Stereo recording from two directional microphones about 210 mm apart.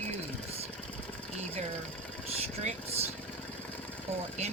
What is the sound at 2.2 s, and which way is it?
Speech, 30° right (ahead or behind).